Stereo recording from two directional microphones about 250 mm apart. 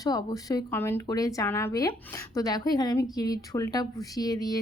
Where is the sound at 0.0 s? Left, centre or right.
Centre.